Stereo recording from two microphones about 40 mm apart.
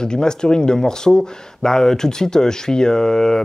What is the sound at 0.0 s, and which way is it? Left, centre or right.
Speech, centre.